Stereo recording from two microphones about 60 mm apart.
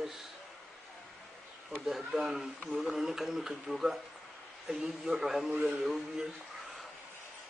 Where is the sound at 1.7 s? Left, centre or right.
Centre.